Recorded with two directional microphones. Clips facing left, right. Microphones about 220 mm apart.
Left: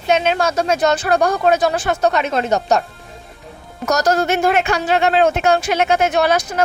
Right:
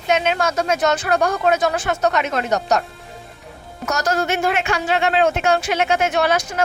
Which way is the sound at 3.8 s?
40° left (ahead or behind).